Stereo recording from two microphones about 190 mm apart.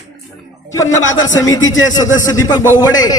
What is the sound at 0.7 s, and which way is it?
Speech, 15° left (ahead or behind).